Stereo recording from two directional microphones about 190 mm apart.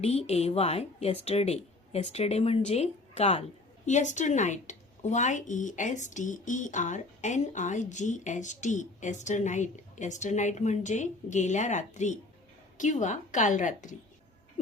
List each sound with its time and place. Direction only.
0.0 s a woman's voice: 35° left (ahead or behind)